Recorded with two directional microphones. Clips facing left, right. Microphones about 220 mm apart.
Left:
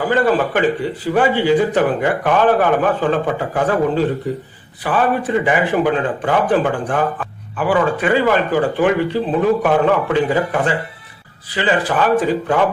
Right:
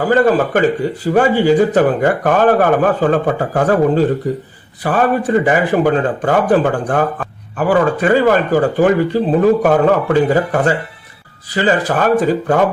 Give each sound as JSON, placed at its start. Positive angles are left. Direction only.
{"t": 0.0, "sound": "a man's voice", "side_deg": -45}